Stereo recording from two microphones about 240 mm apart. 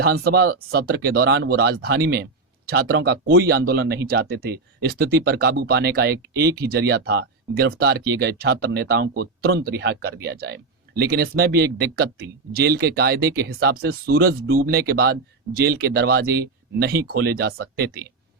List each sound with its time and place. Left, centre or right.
0.0 s speech: right
6.3 s speech: centre
6.6 s speech: right